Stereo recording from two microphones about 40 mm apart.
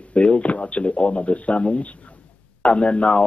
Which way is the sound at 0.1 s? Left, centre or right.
Left.